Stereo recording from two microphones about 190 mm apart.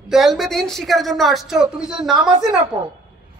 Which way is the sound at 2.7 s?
20° right (ahead or behind).